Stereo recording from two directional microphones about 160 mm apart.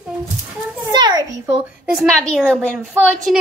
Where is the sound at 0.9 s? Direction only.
25° right (ahead or behind).